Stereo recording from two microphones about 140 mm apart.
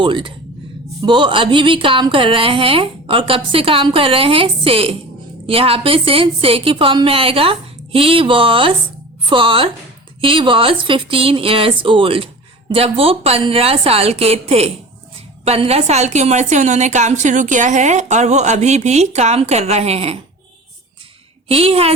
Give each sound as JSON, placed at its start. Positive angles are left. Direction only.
{"t": 0.0, "sound": "a woman's voice", "side_deg": -35}
{"t": 21.4, "sound": "a woman's voice", "side_deg": -45}